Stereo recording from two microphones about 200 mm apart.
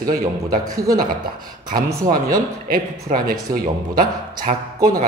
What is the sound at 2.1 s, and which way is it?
Speech, 45° right (ahead or behind).